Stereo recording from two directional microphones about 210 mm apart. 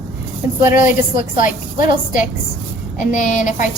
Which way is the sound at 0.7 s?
40° left (ahead or behind).